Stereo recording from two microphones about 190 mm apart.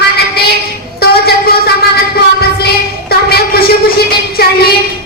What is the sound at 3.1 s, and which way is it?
Speech, 55° left (ahead or behind).